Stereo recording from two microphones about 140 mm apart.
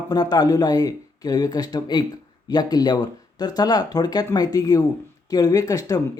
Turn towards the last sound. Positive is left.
turn(degrees=25)  # may be behind; listen again after turning